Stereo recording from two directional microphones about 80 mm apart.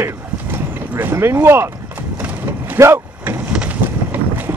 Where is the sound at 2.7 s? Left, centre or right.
Right.